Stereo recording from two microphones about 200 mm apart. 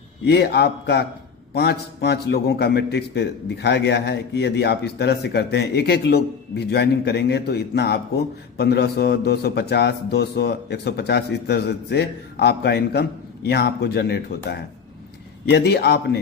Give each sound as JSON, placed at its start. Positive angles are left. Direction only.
{"t": 0.3, "sound": "a man's voice", "side_deg": 55}